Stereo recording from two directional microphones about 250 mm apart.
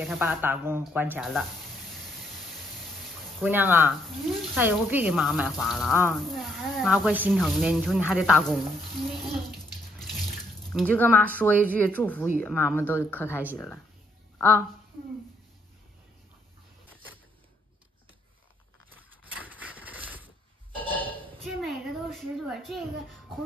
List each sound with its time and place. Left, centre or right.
0.0 s speech: centre
3.3 s speech: centre
13.4 s speech: centre
20.7 s a sound: centre